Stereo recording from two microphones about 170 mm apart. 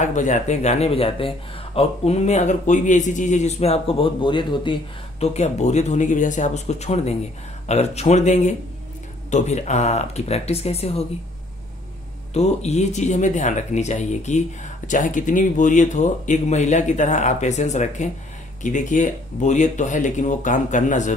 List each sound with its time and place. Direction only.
0.0 s speech: 45° left (ahead or behind); by 4.7 s 30° left (ahead or behind)
5.2 s speech: 40° left (ahead or behind)
12.4 s speech: 40° left (ahead or behind)